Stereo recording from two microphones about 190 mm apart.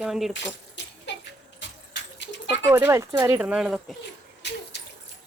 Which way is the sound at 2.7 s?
15° right (ahead or behind).